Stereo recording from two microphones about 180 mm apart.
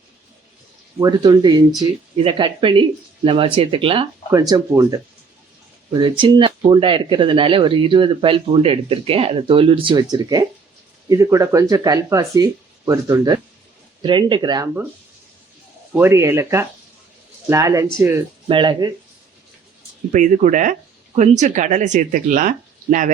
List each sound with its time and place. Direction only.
0.9 s speech: 20° right (ahead or behind)
4.3 s speech: 20° right (ahead or behind)
16.0 s speech: 15° right (ahead or behind)
20.1 s speech: 45° right (ahead or behind)